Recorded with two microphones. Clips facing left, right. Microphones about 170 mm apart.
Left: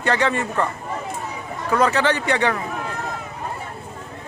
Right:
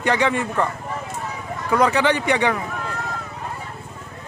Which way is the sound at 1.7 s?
15° right (ahead or behind).